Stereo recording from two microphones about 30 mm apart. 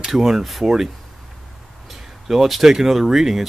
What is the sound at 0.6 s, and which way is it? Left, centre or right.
Speech, centre.